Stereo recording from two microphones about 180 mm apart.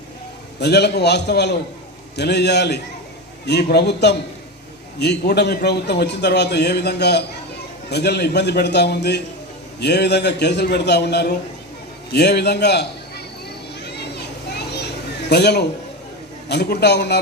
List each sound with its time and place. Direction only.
0.6 s a man's voice: 65° left (ahead or behind)
13.7 s children playing: 65° left (ahead or behind)
15.3 s a man's voice: 65° left (ahead or behind)